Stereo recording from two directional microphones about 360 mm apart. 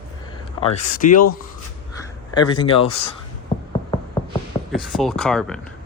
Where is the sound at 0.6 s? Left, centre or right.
Centre.